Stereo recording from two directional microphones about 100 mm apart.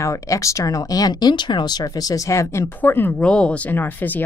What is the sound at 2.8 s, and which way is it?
Speech, 20° left (ahead or behind).